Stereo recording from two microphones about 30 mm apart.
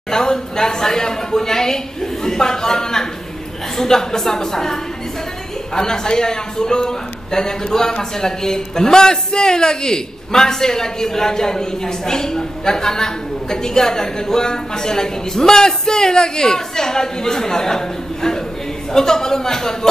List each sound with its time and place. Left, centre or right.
0.1 s a man's voice: left
5.8 s a man's voice: left